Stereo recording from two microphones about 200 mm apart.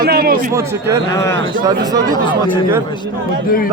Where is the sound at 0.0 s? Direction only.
50° right (ahead or behind).